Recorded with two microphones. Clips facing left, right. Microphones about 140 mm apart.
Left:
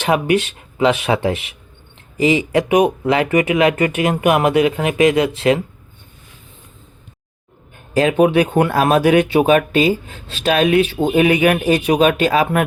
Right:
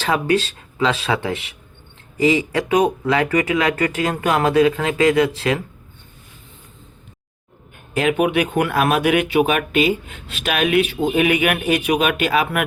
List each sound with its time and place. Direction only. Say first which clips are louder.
0.0 s speech: left 3 dB; 20° left (ahead or behind)
7.9 s speech: left 4 dB; 35° left (ahead or behind)